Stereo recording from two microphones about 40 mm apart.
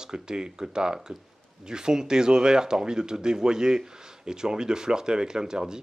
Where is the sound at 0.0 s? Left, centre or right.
Centre.